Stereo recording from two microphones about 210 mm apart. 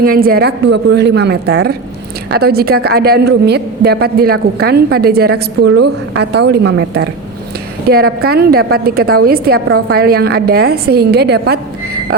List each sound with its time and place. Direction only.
0.0 s a woman's voice: 45° right (ahead or behind)